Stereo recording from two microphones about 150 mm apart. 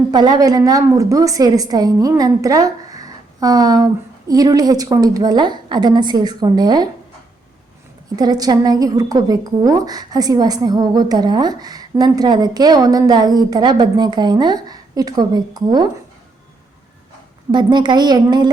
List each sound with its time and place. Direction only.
0.1 s a woman's voice: 30° right (ahead or behind)
8.1 s a woman's voice: 25° right (ahead or behind)
17.5 s a woman's voice: 30° right (ahead or behind)